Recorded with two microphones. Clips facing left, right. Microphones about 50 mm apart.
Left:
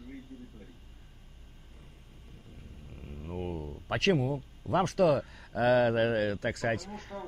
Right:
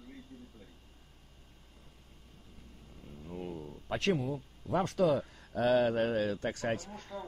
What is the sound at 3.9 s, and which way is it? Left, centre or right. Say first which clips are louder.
Speech: left 4 dB; left.